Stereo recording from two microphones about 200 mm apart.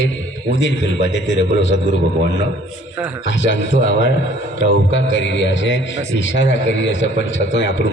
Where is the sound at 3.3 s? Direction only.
65° left (ahead or behind).